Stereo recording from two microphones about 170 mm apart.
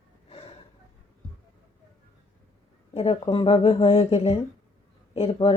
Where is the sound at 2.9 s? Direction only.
35° left (ahead or behind).